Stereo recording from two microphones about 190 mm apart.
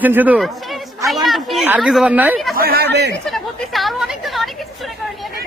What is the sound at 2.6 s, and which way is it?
Speech, 55° right (ahead or behind).